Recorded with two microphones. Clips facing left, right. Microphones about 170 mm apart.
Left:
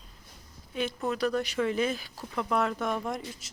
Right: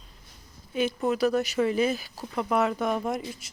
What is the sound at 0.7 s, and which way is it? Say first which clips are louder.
Speech: right 5 dB; 5° right (ahead or behind).